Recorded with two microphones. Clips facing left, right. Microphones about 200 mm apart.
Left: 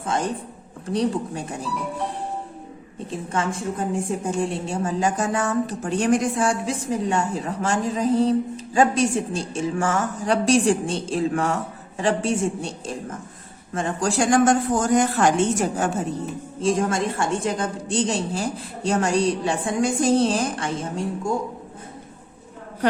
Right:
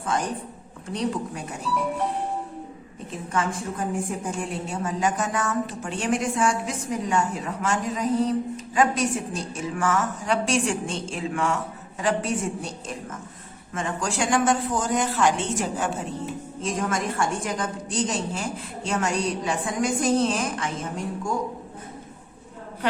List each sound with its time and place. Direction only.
0.0 s speech: 25° left (ahead or behind)
3.1 s a woman's voice: 25° left (ahead or behind); by 15.9 s 45° left (ahead or behind)
16.6 s a woman's voice: 30° left (ahead or behind)